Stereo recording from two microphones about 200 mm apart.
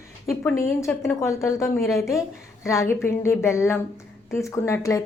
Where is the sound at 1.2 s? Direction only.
15° left (ahead or behind).